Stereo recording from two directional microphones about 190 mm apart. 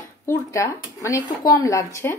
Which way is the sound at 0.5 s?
15° left (ahead or behind).